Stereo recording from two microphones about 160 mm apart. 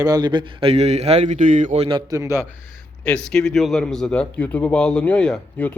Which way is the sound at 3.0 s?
5° left (ahead or behind).